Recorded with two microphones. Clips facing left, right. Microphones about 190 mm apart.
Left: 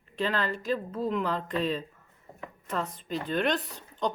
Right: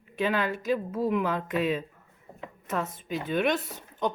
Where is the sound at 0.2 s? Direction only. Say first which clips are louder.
Right 2 dB; 5° right (ahead or behind).